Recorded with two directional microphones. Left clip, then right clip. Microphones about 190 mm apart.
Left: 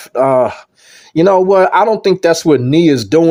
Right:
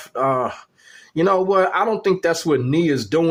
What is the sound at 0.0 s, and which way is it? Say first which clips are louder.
Speech: left 9 dB; 35° left (ahead or behind).